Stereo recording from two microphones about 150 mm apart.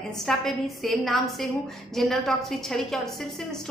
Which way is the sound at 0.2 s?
Centre (ahead or behind).